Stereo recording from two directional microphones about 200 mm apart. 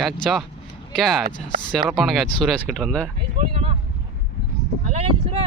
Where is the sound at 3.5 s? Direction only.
30° right (ahead or behind).